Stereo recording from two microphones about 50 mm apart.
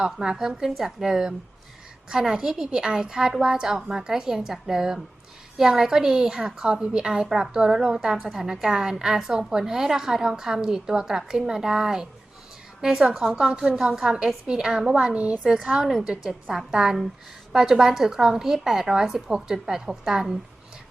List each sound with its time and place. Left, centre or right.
0.0 s a woman's voice: centre
15.9 s a woman's voice: centre
16.7 s a woman's voice: centre